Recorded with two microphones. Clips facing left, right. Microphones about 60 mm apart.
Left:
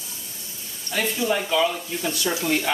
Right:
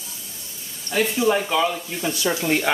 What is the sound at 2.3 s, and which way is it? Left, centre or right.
Speech, right.